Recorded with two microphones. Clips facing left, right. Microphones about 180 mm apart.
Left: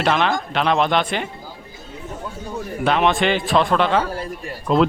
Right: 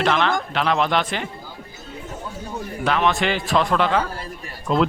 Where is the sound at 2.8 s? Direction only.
20° left (ahead or behind).